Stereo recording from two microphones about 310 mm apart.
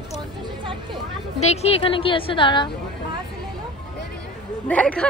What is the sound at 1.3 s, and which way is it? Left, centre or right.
A woman's voice, left.